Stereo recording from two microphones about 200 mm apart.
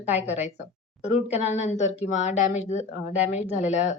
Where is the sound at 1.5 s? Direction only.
35° left (ahead or behind).